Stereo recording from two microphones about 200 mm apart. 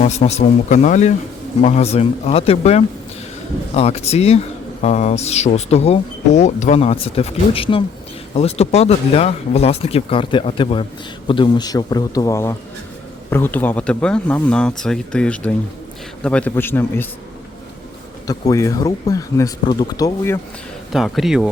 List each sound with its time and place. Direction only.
0.0 s a man's voice: 35° left (ahead or behind); by 17.1 s 10° left (ahead or behind)
18.3 s speech: 15° left (ahead or behind)
20.9 s speech: centre (ahead or behind)